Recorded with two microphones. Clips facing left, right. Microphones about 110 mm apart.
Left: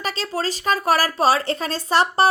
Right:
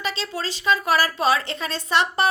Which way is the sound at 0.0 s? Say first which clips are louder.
Left 3 dB; 40° left (ahead or behind).